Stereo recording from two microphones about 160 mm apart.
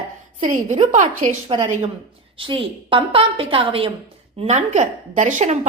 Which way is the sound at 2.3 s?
35° right (ahead or behind).